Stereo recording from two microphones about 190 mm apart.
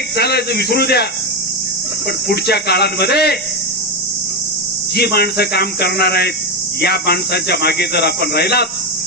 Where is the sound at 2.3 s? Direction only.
60° left (ahead or behind).